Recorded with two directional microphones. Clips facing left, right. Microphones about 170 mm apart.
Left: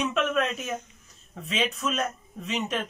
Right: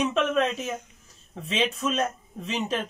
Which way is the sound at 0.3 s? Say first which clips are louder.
Right 2 dB; 30° right (ahead or behind).